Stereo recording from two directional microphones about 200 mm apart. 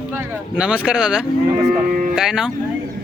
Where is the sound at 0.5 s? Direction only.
5° right (ahead or behind).